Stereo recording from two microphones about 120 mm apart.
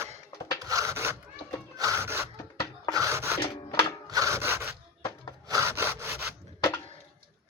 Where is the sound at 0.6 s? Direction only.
30° right (ahead or behind).